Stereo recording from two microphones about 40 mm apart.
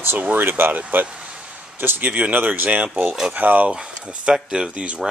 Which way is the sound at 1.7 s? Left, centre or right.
Right.